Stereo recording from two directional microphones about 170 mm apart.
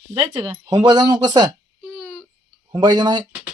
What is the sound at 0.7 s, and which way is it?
Speech, 25° right (ahead or behind).